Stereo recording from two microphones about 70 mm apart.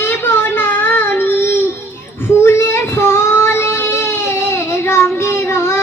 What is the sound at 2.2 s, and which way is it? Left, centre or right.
Child singing, left.